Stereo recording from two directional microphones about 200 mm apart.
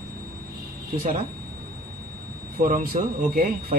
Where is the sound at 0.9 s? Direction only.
40° right (ahead or behind).